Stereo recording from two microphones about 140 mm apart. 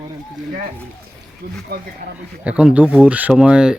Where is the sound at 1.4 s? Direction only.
90° right.